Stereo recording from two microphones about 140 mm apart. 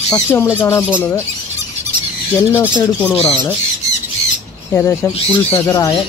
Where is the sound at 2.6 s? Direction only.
15° left (ahead or behind).